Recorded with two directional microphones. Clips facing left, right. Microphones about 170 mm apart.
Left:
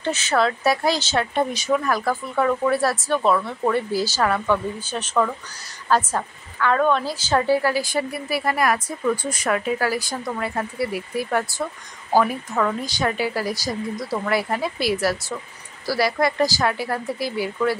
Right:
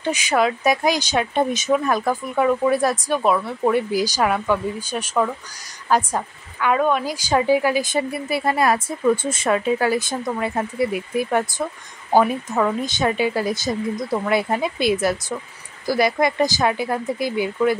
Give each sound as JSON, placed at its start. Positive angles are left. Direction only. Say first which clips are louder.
{"t": 0.0, "sound": "a woman's voice", "louder": "right 1 dB", "side_deg": -15}